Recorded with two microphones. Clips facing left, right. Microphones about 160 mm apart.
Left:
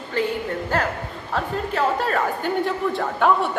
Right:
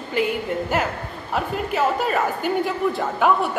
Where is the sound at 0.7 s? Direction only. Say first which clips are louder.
Even; 10° right (ahead or behind).